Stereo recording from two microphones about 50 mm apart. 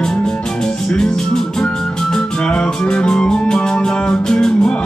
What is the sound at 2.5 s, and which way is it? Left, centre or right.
Music, centre.